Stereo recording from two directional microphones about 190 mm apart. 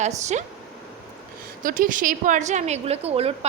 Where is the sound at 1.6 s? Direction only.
45° right (ahead or behind).